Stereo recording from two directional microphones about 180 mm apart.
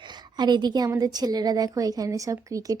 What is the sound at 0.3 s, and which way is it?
A woman's voice, 25° right (ahead or behind).